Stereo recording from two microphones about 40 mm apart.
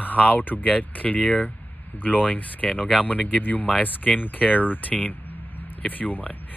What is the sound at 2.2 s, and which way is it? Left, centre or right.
Speech, left.